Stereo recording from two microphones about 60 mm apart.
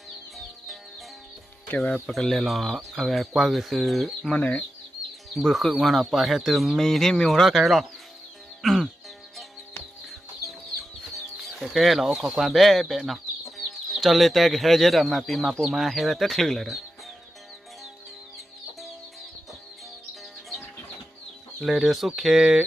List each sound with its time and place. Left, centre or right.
1.8 s speech: centre
4.4 s speech: left
5.3 s speech: centre
9.0 s music: centre
11.6 s speech: centre
12.5 s speech: centre
21.6 s speech: centre